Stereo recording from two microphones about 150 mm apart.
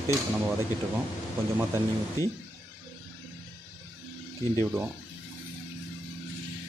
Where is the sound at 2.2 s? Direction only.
20° left (ahead or behind).